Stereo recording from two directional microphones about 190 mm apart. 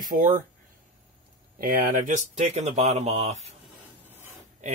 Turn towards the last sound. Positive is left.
turn(degrees=-35)  # may be behind; listen again after turning